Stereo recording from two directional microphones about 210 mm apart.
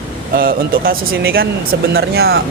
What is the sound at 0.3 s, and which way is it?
A man's voice, 45° right (ahead or behind).